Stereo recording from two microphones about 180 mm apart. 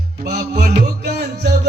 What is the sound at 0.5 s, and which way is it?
Music, 45° right (ahead or behind).